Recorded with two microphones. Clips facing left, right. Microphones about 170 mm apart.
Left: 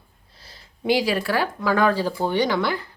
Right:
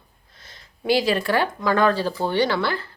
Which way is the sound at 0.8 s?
10° left (ahead or behind).